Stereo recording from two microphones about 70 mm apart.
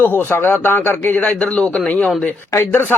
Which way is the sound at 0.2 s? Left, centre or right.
Left.